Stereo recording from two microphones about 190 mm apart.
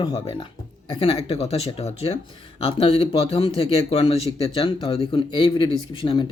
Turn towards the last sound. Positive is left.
turn(degrees=25)  # may be behind; listen again after turning